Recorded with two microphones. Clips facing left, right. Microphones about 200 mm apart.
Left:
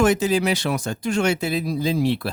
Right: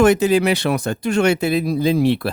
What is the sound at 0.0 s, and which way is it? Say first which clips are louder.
Speech: right 5 dB; 60° right (ahead or behind).